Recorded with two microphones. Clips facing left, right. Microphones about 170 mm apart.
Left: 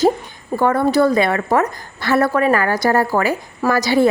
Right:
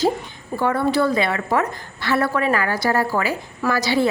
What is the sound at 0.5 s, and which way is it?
A woman's voice, 45° left (ahead or behind).